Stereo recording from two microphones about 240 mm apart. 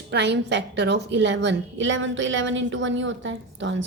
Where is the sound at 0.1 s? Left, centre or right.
Right.